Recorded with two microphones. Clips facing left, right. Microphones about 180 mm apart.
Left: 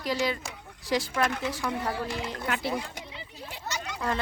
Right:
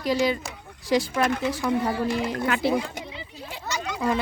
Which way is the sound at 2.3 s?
90° right.